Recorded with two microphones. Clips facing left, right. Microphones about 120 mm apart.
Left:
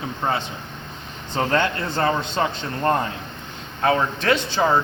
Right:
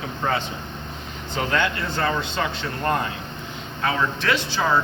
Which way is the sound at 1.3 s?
35° left (ahead or behind).